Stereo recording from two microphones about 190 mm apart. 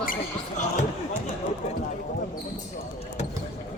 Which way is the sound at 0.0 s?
45° left (ahead or behind).